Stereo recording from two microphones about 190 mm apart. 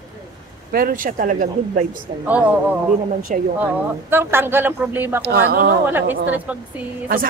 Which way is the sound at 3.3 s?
45° right (ahead or behind).